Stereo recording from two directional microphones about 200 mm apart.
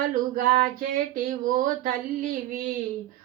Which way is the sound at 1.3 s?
40° right (ahead or behind).